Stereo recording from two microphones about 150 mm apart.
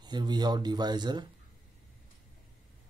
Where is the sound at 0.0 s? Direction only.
30° right (ahead or behind).